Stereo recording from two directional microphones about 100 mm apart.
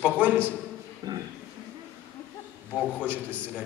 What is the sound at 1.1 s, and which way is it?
Speech, 40° right (ahead or behind).